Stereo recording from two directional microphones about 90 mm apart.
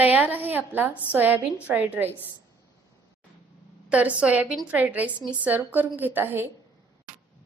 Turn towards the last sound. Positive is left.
turn(degrees=-25)  # may be behind; listen again after turning